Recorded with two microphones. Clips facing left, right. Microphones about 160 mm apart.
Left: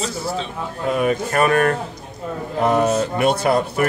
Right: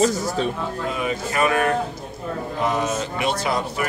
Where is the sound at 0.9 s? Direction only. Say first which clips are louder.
Left 8 dB; 55° left (ahead or behind).